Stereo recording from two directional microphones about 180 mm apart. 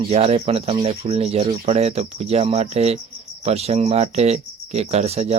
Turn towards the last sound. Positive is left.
turn(degrees=-35)  # may be behind; listen again after turning